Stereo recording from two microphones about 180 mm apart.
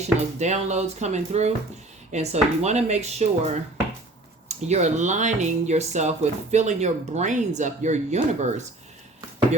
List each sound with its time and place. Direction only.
0.0 s speech: 40° right (ahead or behind)